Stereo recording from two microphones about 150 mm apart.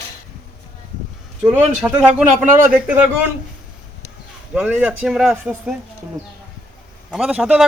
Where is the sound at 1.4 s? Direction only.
10° right (ahead or behind).